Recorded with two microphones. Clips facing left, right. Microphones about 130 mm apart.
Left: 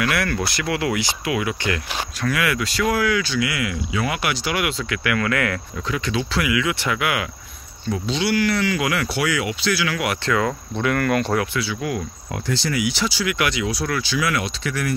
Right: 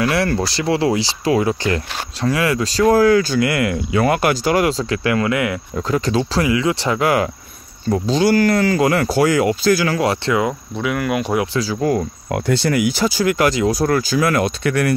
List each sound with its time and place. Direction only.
0.0 s speech: 30° right (ahead or behind)
5.8 s speech: 40° right (ahead or behind)
9.9 s speech: 25° right (ahead or behind)
10.7 s speech: 5° right (ahead or behind)
11.5 s speech: 35° right (ahead or behind)
12.3 s speech: 60° right (ahead or behind)